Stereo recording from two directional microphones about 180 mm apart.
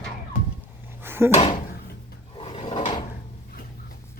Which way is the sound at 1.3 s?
35° left (ahead or behind).